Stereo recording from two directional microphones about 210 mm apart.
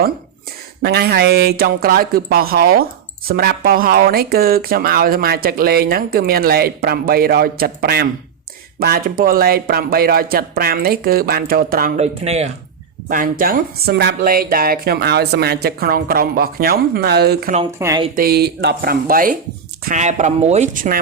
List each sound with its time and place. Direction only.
0.8 s speech: 50° right (ahead or behind)
11.9 s speech: 30° right (ahead or behind); by 17.5 s 50° right (ahead or behind)
17.7 s speech: 15° right (ahead or behind)
18.2 s speech: 50° right (ahead or behind)